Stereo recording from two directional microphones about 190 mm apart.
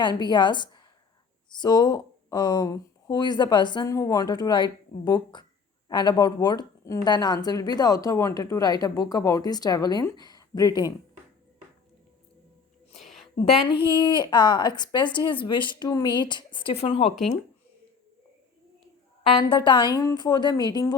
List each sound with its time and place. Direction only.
0.0 s speech: 25° left (ahead or behind)
13.0 s a sound: centre (ahead or behind)
13.7 s speech: 25° left (ahead or behind)
17.1 s speech: centre (ahead or behind)
19.3 s speech: 25° left (ahead or behind)